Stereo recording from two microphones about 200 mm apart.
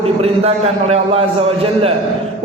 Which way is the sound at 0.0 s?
30° right (ahead or behind).